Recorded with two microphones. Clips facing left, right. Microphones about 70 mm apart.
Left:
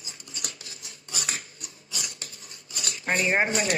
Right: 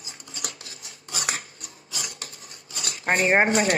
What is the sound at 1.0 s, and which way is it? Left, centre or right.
Scissors, right.